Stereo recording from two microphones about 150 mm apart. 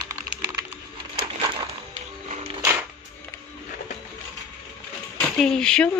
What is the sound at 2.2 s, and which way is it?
Music, 50° right (ahead or behind).